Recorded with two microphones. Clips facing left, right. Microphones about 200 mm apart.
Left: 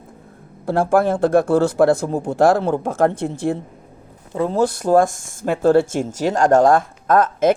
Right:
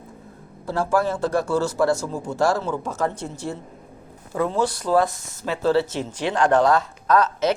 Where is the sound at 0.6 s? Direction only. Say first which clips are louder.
Left 5 dB; 55° left (ahead or behind).